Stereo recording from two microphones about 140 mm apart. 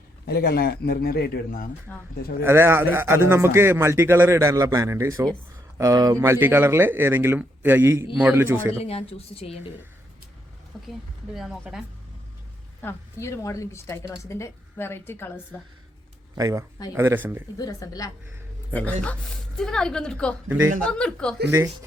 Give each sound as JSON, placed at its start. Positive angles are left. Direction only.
{"t": 0.3, "sound": "a man's voice", "side_deg": 90}
{"t": 1.9, "sound": "speech", "side_deg": 15}
{"t": 2.4, "sound": "a man's voice", "side_deg": -15}
{"t": 8.8, "sound": "speech", "side_deg": 45}
{"t": 10.7, "sound": "speech", "side_deg": 0}
{"t": 12.8, "sound": "speech", "side_deg": 20}
{"t": 16.3, "sound": "a man's voice", "side_deg": -25}
{"t": 17.6, "sound": "speech", "side_deg": 25}
{"t": 18.7, "sound": "speech", "side_deg": 10}
{"t": 20.5, "sound": "a man's voice", "side_deg": -10}
{"t": 21.0, "sound": "speech", "side_deg": 5}